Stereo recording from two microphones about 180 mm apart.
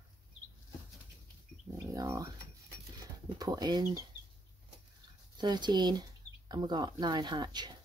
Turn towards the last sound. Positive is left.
turn(degrees=-25)  # may be behind; listen again after turning